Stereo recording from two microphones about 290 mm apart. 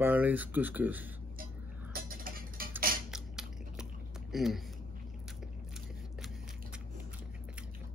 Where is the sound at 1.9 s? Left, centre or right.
Right.